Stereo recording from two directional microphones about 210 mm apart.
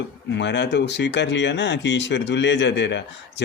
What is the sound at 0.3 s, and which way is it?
Speech, 55° left (ahead or behind).